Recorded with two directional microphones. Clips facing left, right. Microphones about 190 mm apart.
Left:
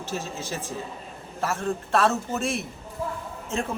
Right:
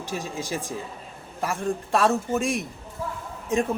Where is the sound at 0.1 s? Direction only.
15° right (ahead or behind).